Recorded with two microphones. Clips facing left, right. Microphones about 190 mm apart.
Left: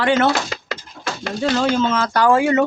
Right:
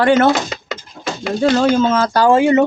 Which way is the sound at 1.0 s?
25° right (ahead or behind).